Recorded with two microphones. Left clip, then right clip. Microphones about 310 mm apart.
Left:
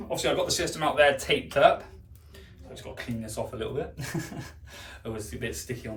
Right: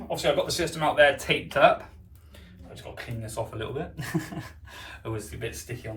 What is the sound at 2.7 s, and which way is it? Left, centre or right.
Speech, centre.